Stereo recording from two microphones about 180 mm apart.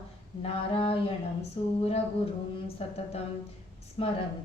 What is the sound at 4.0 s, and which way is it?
Speech, 35° left (ahead or behind).